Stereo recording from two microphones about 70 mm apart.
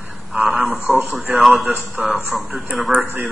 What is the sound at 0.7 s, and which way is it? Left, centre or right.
Speech, right.